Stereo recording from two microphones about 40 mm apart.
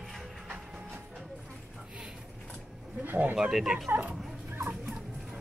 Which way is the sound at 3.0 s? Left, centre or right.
Right.